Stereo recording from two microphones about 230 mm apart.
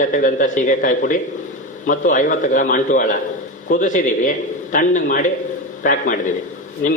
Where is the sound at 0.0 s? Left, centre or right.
Left.